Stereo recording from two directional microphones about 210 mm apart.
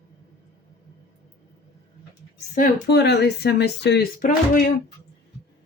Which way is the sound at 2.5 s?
45° left (ahead or behind).